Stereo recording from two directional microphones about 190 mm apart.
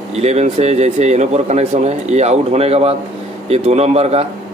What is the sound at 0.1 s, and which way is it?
Speech, 35° right (ahead or behind).